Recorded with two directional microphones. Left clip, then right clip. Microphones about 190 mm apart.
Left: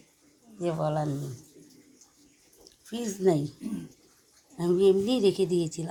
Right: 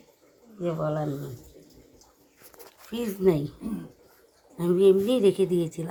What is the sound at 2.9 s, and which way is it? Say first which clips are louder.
Speech: right 2 dB; centre (ahead or behind).